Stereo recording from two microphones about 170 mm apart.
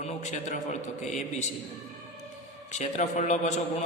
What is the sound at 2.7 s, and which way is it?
Speech, 45° left (ahead or behind).